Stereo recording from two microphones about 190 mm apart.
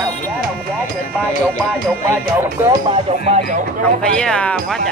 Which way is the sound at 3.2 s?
35° right (ahead or behind).